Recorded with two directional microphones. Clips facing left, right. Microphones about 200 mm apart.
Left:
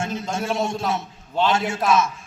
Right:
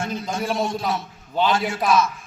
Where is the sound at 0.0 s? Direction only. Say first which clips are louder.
Even; 25° left (ahead or behind).